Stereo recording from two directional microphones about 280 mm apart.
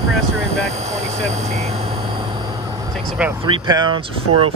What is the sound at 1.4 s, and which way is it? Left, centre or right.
Speech, right.